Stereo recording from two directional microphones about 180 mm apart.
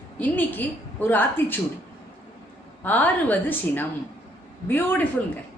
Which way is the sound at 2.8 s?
10° left (ahead or behind).